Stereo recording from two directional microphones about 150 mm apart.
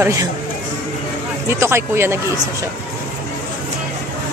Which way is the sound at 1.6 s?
15° right (ahead or behind).